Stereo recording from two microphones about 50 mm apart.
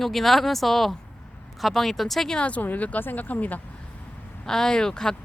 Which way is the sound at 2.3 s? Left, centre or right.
Left.